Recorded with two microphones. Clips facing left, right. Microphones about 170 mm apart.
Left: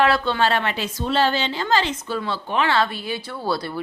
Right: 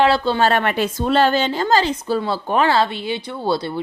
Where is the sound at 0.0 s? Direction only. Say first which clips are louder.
Right 3 dB; 30° right (ahead or behind).